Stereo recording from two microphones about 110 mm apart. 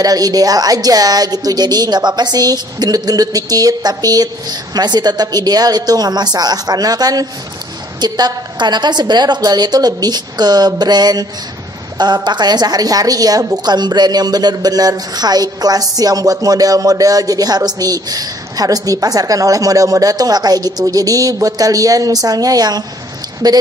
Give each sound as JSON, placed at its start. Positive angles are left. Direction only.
{"t": 0.0, "sound": "a woman's voice", "side_deg": -35}